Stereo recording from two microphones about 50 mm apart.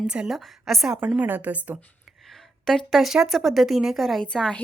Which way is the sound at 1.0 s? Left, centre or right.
Right.